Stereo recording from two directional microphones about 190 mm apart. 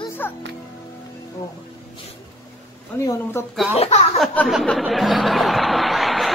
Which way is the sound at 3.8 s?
35° left (ahead or behind).